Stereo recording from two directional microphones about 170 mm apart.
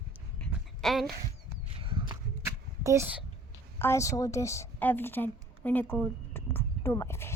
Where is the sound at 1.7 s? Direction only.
30° right (ahead or behind).